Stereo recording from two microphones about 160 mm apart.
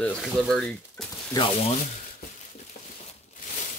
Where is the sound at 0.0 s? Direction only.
5° left (ahead or behind).